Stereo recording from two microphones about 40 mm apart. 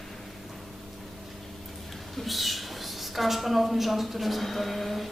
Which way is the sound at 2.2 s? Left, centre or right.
Centre.